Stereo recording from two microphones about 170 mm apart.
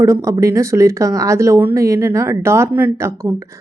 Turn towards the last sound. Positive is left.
turn(degrees=-15)  # may be behind; listen again after turning